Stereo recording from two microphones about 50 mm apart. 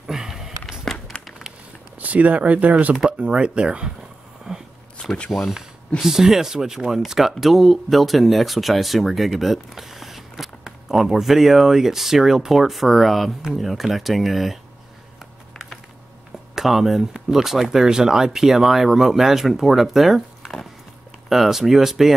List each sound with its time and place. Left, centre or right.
0.0 s a sound: centre
2.0 s speech: right
5.3 s speech: centre
5.9 s speech: centre
16.5 s speech: centre